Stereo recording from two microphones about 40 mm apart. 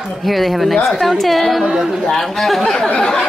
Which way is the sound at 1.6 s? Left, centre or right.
Centre.